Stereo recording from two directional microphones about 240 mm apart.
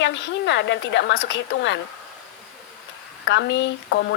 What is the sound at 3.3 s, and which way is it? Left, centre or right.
Speech, left.